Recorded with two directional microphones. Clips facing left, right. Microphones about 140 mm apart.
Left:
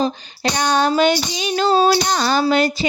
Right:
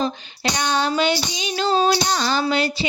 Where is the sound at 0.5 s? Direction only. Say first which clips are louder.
Left 4 dB; 50° left (ahead or behind).